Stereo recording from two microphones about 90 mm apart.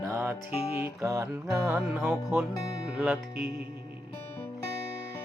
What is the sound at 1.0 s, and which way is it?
Music, 35° right (ahead or behind).